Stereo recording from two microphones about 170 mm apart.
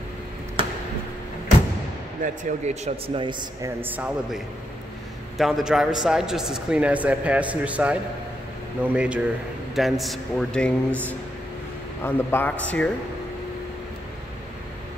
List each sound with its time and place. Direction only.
2.2 s speech: 40° right (ahead or behind)
3.3 s speech: 25° right (ahead or behind)
3.8 s a man's voice: 10° right (ahead or behind)
5.4 s a man's voice: centre (ahead or behind)
12.0 s a man's voice: 15° left (ahead or behind)